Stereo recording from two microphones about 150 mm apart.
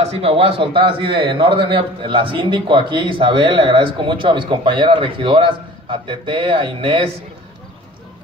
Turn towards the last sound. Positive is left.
turn(degrees=-35)  # may be behind; listen again after turning